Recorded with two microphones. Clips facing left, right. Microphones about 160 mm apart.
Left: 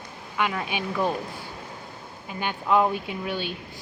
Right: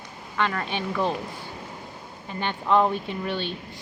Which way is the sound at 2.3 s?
5° left (ahead or behind).